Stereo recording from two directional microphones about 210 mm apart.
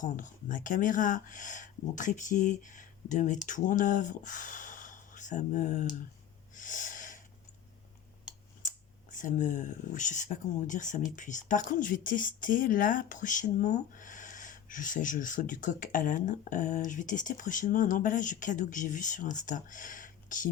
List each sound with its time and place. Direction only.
0.0 s speech: 40° left (ahead or behind)
6.6 s snort: 40° left (ahead or behind)
9.1 s speech: 35° left (ahead or behind)